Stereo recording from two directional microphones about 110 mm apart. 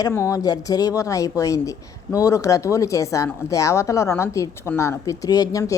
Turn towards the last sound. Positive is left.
turn(degrees=30)  # may be behind; listen again after turning